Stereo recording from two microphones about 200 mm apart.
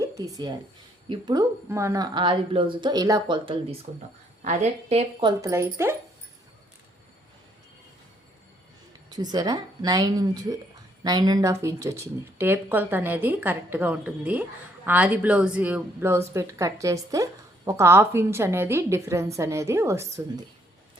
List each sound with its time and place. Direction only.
0.0 s a woman's voice: 15° right (ahead or behind)
5.4 s speech: 15° right (ahead or behind)
9.0 s speech: 20° right (ahead or behind)